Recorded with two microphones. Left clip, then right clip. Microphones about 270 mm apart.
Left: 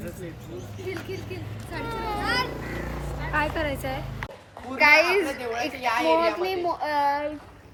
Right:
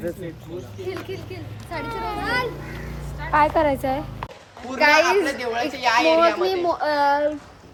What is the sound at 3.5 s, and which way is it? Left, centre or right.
Speech, right.